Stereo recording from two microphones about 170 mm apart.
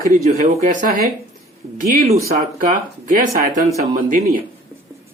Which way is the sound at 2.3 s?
50° right (ahead or behind).